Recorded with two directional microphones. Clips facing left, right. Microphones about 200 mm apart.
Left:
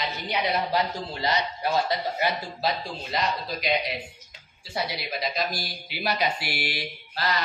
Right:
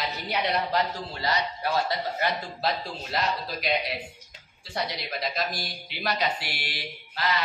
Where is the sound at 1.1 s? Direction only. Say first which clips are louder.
Left 2 dB; 20° left (ahead or behind).